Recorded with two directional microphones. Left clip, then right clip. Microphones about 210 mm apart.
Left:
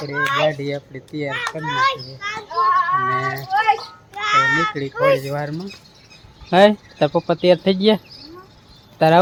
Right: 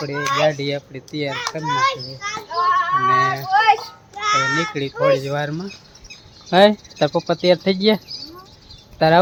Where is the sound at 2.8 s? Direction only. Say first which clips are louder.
Right 1 dB; 45° right (ahead or behind).